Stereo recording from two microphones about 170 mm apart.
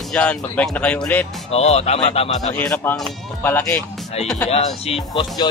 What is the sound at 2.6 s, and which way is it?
Speech, 10° left (ahead or behind).